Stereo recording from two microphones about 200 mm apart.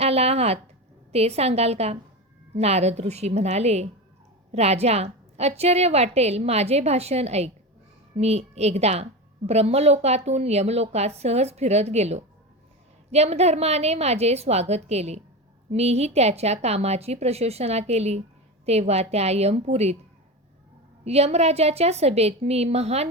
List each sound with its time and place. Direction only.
0.0 s a woman's voice: 30° right (ahead or behind)
21.0 s a woman's voice: 30° right (ahead or behind)